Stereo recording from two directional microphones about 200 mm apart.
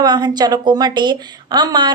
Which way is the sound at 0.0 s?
20° right (ahead or behind).